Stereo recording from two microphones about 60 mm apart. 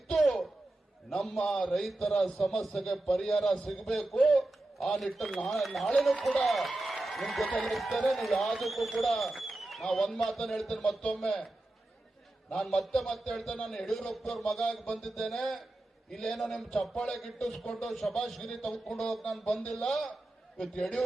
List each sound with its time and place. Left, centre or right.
0.1 s a sound: centre
1.1 s a man's voice: centre
12.5 s a man's voice: centre